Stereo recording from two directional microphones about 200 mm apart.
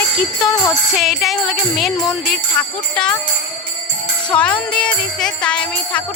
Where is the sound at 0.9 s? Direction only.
Centre (ahead or behind).